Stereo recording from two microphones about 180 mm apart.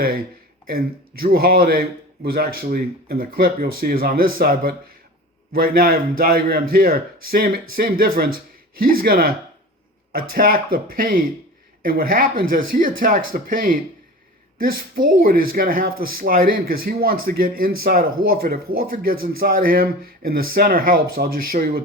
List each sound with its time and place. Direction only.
0.7 s speech: 55° right (ahead or behind)